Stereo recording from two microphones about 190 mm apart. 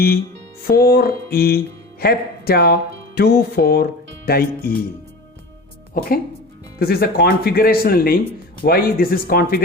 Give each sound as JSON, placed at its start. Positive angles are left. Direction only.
{"t": 0.7, "sound": "speech", "side_deg": 50}
{"t": 3.2, "sound": "music", "side_deg": 55}
{"t": 4.3, "sound": "speech", "side_deg": 50}
{"t": 5.9, "sound": "speech", "side_deg": 50}